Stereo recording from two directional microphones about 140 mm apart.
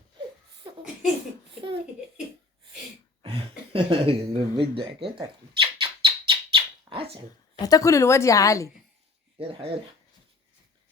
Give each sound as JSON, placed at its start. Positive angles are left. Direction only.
{"t": 3.2, "sound": "speech", "side_deg": -40}
{"t": 5.0, "sound": "bird", "side_deg": -40}
{"t": 7.6, "sound": "a woman's voice", "side_deg": 25}
{"t": 9.4, "sound": "speech", "side_deg": -40}